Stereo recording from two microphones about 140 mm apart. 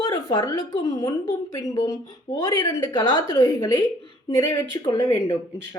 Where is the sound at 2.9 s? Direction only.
35° left (ahead or behind).